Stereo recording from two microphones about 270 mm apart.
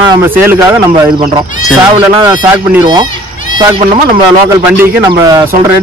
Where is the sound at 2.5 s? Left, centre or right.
Centre.